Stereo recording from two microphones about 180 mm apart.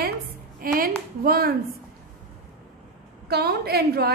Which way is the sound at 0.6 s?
55° right (ahead or behind).